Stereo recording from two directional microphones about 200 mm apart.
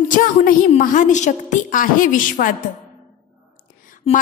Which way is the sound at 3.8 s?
40° left (ahead or behind).